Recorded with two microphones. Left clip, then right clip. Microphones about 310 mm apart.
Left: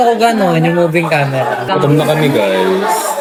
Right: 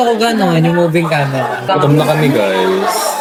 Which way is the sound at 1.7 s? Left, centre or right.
Centre.